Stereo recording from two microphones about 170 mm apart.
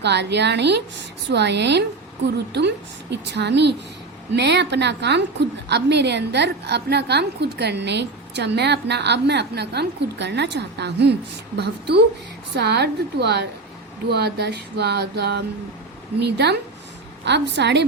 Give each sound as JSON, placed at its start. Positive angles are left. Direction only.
{"t": 0.0, "sound": "a woman's voice", "side_deg": -90}
{"t": 11.5, "sound": "a sound", "side_deg": -75}
{"t": 16.2, "sound": "a woman's voice", "side_deg": -80}
{"t": 17.2, "sound": "a woman's voice", "side_deg": -90}